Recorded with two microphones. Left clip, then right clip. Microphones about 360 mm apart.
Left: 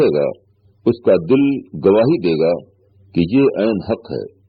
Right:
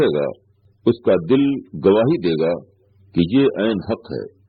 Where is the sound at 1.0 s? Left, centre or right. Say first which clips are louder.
Left 4 dB; left.